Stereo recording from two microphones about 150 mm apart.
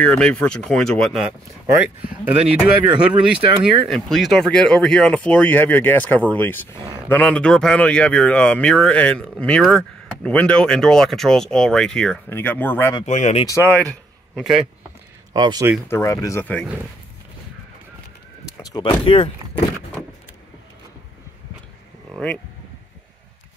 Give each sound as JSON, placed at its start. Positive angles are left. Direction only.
{"t": 0.0, "sound": "speech", "side_deg": 10}
{"t": 2.6, "sound": "speech", "side_deg": -5}
{"t": 3.3, "sound": "speech", "side_deg": -40}
{"t": 3.9, "sound": "speech", "side_deg": 0}
{"t": 13.0, "sound": "speech", "side_deg": 55}
{"t": 13.5, "sound": "speech", "side_deg": 15}
{"t": 14.3, "sound": "speech", "side_deg": 0}
{"t": 15.3, "sound": "speech", "side_deg": -30}
{"t": 15.9, "sound": "speech", "side_deg": 20}
{"t": 18.6, "sound": "speech", "side_deg": 25}
{"t": 22.1, "sound": "speech", "side_deg": 5}